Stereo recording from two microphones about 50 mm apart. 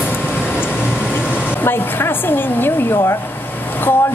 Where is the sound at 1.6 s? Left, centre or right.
Left.